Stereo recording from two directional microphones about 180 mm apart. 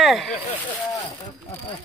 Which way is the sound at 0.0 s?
Centre (ahead or behind).